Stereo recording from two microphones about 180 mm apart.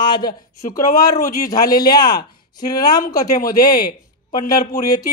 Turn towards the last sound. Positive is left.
turn(degrees=20)  # may be behind; listen again after turning